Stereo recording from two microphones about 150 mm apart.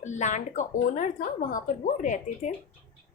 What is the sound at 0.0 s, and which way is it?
A woman's voice, 50° left (ahead or behind).